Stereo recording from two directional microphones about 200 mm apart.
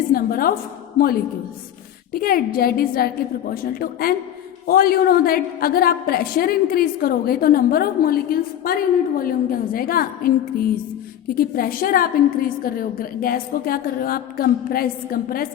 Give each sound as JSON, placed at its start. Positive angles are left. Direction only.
{"t": 0.1, "sound": "a woman's voice", "side_deg": 45}
{"t": 2.1, "sound": "a woman's voice", "side_deg": 50}